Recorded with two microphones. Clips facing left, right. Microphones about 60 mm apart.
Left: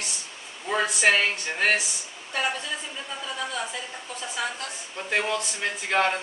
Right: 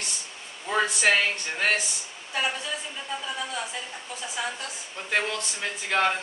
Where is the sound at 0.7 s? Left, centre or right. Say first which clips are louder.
Left 1 dB; centre.